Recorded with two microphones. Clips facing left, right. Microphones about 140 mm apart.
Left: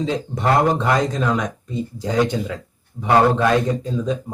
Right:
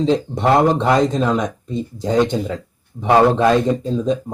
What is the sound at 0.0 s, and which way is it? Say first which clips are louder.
A man's voice: right 5 dB; 25° right (ahead or behind).